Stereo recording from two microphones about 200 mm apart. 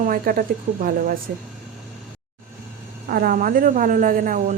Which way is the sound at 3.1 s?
45° right (ahead or behind).